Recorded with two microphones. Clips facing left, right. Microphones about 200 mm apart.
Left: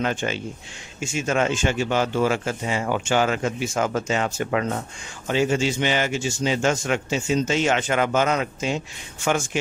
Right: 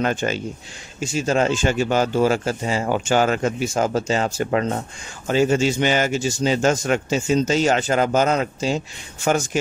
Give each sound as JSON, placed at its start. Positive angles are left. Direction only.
{"t": 0.0, "sound": "speech", "side_deg": -40}